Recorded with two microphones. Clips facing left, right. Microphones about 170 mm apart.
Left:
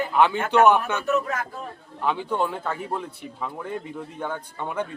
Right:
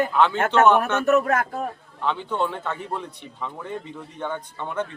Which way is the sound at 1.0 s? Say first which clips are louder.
Right 5 dB; 60° right (ahead or behind).